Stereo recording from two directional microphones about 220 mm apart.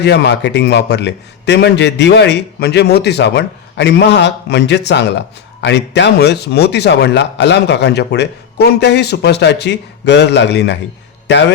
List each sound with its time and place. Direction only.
0.0 s a man's voice: 50° left (ahead or behind)